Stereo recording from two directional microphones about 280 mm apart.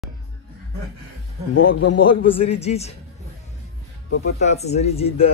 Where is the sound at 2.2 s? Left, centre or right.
Left.